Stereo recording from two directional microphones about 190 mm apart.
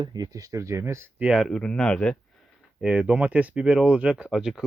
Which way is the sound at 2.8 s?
5° right (ahead or behind).